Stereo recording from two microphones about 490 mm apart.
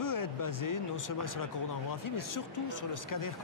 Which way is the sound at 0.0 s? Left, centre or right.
Left.